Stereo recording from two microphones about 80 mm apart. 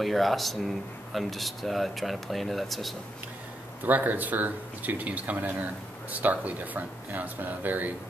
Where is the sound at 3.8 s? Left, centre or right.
Right.